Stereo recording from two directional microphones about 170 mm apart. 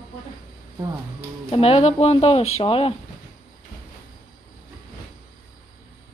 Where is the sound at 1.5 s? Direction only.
35° left (ahead or behind).